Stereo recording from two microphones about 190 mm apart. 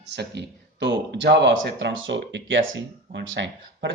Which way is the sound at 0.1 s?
65° right (ahead or behind).